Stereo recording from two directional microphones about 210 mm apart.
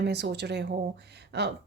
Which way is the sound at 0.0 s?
55° right (ahead or behind).